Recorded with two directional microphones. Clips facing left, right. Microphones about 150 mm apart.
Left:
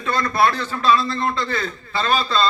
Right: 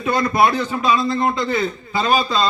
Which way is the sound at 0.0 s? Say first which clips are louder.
Right 2 dB; 20° right (ahead or behind).